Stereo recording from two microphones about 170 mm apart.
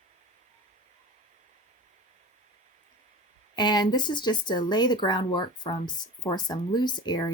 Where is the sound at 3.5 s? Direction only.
25° left (ahead or behind).